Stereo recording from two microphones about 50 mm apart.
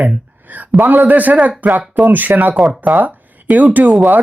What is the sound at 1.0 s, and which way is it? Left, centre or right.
Speech, right.